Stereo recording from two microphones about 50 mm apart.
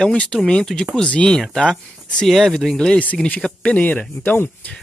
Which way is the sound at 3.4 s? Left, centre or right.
Left.